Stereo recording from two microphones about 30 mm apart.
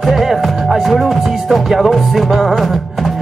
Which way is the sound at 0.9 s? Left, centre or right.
Centre.